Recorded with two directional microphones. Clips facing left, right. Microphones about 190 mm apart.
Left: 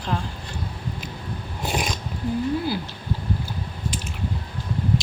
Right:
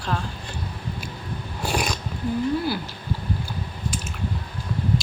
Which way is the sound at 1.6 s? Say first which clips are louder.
Right 1 dB; 20° left (ahead or behind).